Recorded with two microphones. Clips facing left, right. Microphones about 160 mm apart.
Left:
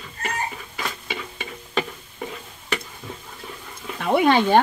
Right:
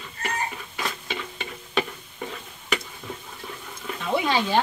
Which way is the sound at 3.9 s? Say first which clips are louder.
Left 6 dB; 60° left (ahead or behind).